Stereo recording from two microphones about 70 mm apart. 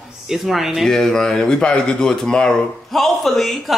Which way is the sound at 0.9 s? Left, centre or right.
Centre.